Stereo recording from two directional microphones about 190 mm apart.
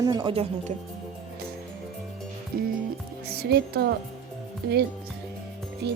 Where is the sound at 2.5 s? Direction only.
50° right (ahead or behind).